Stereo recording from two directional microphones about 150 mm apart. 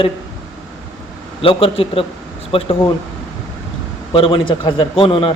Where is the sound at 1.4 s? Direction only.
40° left (ahead or behind).